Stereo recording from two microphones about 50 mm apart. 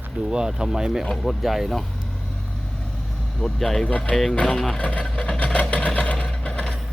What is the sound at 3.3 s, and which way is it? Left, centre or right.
Speech, centre.